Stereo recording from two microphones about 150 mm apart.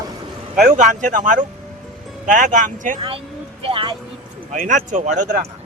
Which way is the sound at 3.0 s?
35° right (ahead or behind).